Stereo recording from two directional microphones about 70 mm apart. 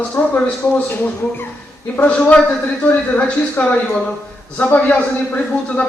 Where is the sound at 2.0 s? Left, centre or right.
Centre.